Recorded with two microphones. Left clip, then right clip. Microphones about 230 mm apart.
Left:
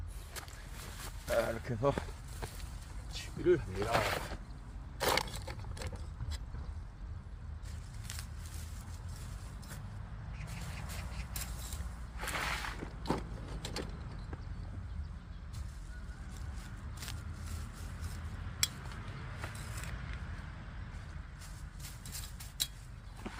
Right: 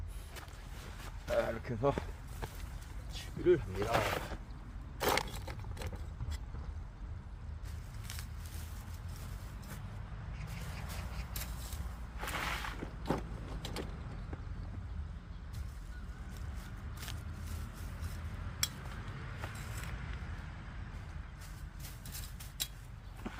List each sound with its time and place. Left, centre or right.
1.0 s walk: left
3.1 s speech: centre
4.9 s a sound: centre
12.2 s vehicle: centre
19.4 s vehicle: centre
22.0 s a sound: centre
23.2 s walk: centre